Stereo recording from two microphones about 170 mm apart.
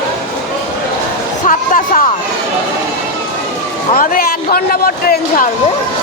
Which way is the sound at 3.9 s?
55° left (ahead or behind).